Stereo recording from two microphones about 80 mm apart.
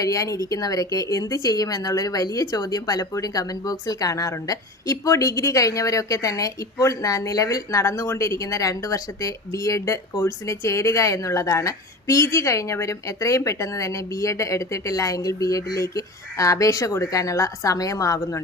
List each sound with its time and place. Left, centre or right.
0.0 s a woman's voice: left